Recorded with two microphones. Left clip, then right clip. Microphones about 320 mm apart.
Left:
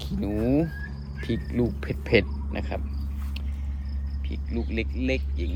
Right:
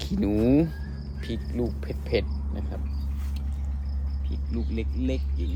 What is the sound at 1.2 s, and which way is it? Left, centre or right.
Speech, left.